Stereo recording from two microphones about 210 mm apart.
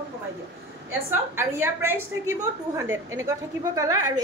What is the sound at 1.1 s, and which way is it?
A woman's voice, 10° right (ahead or behind).